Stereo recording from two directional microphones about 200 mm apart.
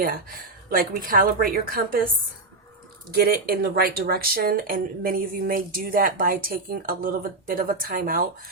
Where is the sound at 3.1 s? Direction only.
50° right (ahead or behind).